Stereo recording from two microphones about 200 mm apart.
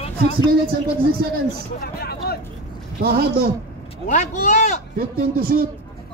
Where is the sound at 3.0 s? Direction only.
50° right (ahead or behind).